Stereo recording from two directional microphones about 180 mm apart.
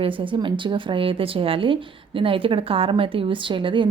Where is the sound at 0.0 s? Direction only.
30° right (ahead or behind).